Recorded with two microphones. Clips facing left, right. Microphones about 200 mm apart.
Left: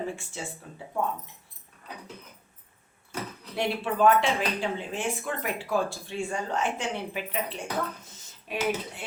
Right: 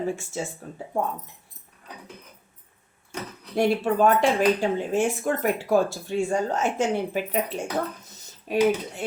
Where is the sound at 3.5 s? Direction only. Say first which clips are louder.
Right 7 dB; 40° right (ahead or behind).